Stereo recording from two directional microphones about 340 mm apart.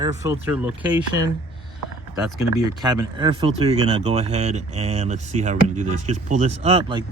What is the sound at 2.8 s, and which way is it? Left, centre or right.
Speech, centre.